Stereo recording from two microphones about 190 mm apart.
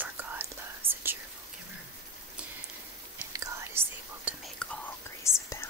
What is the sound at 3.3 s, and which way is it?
Whispering, 15° right (ahead or behind).